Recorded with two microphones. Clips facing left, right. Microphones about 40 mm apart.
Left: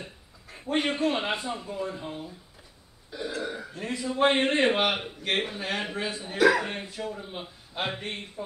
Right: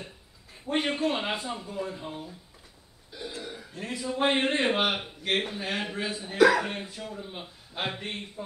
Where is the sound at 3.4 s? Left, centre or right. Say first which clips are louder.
Left 6 dB; centre.